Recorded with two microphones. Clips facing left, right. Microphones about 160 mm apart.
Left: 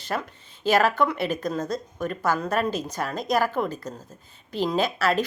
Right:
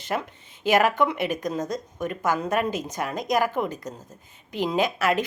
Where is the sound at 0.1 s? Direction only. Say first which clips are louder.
Right 1 dB; 15° right (ahead or behind).